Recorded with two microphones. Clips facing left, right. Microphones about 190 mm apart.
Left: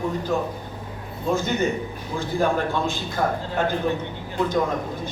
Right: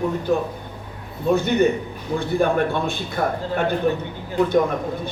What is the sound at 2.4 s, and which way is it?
Speech, 60° right (ahead or behind).